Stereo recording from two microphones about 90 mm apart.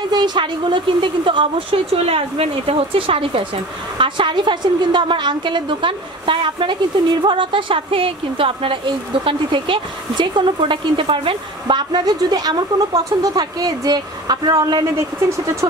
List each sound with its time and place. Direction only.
0.1 s a woman's voice: 50° right (ahead or behind); by 3.4 s 90° right
4.0 s a woman's voice: 65° right (ahead or behind)
15.0 s speech: 30° right (ahead or behind)